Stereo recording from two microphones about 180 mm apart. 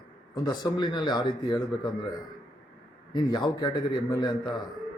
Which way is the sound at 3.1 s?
25° left (ahead or behind).